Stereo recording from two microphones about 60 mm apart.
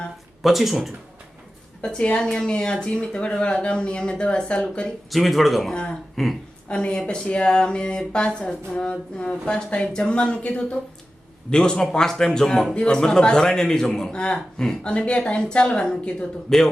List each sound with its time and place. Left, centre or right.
0.4 s speech: centre
1.8 s a man's voice: centre
5.1 s speech: centre
6.7 s a man's voice: centre